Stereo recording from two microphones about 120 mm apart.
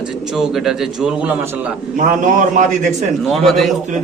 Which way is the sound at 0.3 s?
5° right (ahead or behind).